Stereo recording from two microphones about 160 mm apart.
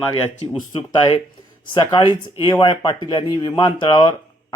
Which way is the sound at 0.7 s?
35° left (ahead or behind).